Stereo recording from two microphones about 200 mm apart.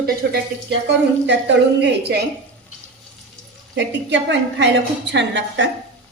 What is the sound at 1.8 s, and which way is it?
Speech, 55° right (ahead or behind).